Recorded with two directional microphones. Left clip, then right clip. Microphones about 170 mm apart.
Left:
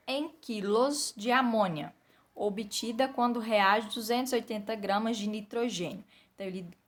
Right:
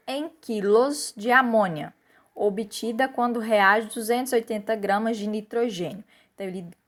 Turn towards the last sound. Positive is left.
turn(degrees=-35)  # may be behind; listen again after turning